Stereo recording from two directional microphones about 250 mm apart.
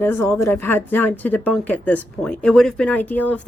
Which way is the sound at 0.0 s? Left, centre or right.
Centre.